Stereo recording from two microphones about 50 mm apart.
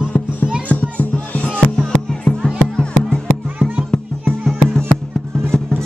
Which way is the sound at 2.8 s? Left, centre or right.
Centre.